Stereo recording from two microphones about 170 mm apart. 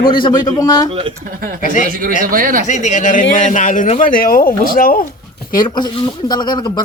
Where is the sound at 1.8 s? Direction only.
55° right (ahead or behind).